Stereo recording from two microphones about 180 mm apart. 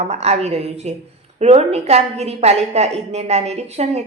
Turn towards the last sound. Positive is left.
turn(degrees=-35)  # may be behind; listen again after turning